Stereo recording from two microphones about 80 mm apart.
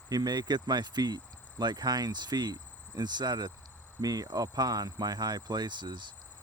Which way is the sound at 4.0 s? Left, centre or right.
Right.